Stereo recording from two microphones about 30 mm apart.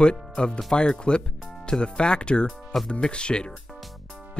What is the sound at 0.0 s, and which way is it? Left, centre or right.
Speech, left.